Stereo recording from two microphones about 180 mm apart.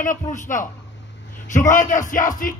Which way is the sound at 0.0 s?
45° left (ahead or behind).